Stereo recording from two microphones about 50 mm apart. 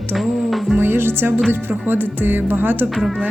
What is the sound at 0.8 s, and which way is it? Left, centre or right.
Speech, right.